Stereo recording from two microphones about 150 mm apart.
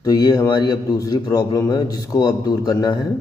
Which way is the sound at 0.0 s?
25° left (ahead or behind).